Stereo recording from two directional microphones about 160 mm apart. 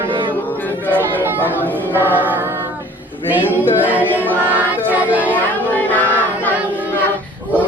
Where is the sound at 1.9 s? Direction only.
10° right (ahead or behind).